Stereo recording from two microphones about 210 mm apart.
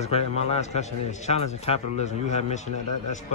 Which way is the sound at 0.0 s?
30° left (ahead or behind).